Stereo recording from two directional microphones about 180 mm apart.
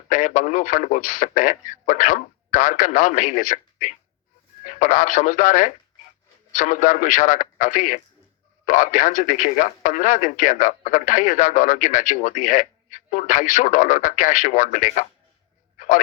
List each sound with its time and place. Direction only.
0.1 s speech: 45° left (ahead or behind)